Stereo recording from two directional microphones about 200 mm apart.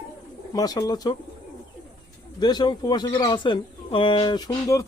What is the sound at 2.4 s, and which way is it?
Speech, 20° left (ahead or behind).